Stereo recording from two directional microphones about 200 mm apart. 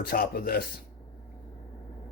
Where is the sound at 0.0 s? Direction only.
50° left (ahead or behind).